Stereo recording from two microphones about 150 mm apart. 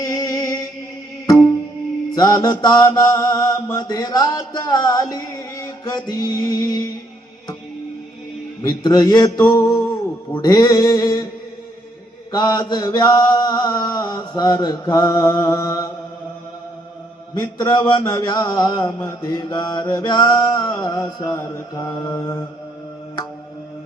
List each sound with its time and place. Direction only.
0.0 s music: 25° left (ahead or behind)
2.1 s mantra: 25° left (ahead or behind)
8.6 s mantra: 25° left (ahead or behind)
12.3 s mantra: 30° left (ahead or behind)
17.3 s mantra: 30° left (ahead or behind)